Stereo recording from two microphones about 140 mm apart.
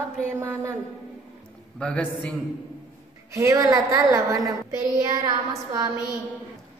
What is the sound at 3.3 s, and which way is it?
Child singing, 20° right (ahead or behind).